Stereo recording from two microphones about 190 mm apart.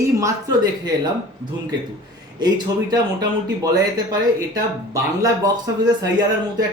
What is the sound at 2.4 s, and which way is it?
Speech, 20° right (ahead or behind).